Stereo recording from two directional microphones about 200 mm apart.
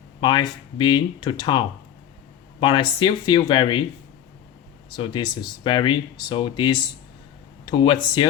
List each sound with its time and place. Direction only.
0.2 s speech: 20° left (ahead or behind)
4.9 s speech: 20° left (ahead or behind)